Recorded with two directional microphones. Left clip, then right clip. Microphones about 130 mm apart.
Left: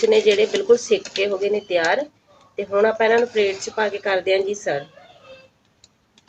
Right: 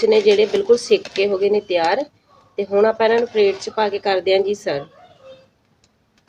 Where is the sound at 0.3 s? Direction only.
90° right.